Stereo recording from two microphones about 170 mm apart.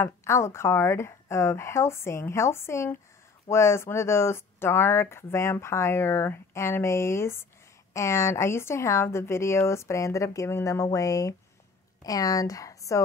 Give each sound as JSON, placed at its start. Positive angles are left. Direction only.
{"t": 0.0, "sound": "a woman's voice", "side_deg": 15}